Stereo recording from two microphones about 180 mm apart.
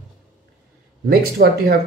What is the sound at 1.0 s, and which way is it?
Speech, 60° right (ahead or behind).